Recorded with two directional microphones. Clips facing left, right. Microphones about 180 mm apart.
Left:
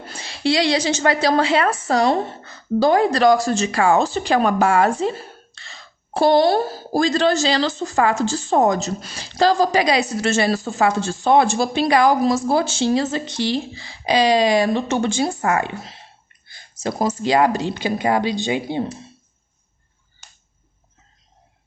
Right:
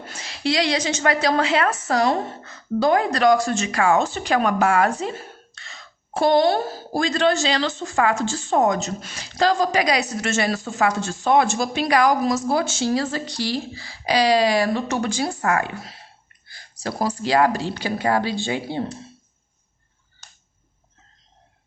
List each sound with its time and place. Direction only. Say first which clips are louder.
0.0 s a woman's voice: left 3 dB; 30° left (ahead or behind)